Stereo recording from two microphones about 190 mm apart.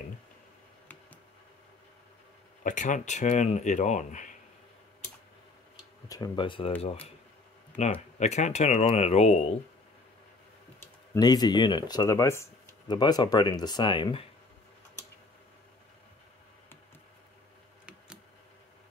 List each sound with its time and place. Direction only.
2.6 s speech: 40° left (ahead or behind)
6.0 s speech: 20° left (ahead or behind)
7.7 s speech: 35° left (ahead or behind)
10.8 s speech: 20° left (ahead or behind)
17.8 s a sound: 5° right (ahead or behind)